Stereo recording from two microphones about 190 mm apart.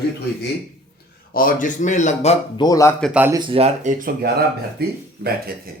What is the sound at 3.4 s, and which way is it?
Speech, 30° right (ahead or behind).